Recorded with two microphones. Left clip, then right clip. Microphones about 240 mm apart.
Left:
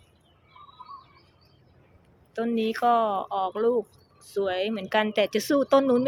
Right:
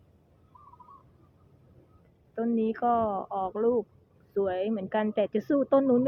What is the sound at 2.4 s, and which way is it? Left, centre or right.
Speech, centre.